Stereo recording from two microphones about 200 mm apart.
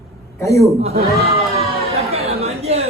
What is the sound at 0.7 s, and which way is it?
Speech, 30° right (ahead or behind).